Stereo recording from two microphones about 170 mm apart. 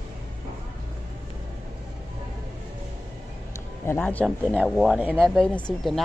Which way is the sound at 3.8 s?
10° left (ahead or behind).